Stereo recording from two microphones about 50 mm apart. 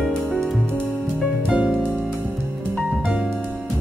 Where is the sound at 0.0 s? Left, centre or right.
Centre.